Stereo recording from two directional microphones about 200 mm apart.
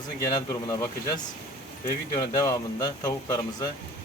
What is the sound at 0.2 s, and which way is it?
Speech, 15° left (ahead or behind).